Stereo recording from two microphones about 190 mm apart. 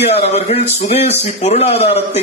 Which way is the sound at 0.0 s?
35° left (ahead or behind).